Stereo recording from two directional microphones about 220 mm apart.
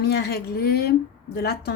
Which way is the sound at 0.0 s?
45° left (ahead or behind).